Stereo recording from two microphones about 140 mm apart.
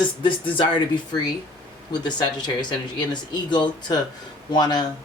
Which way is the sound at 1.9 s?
30° left (ahead or behind).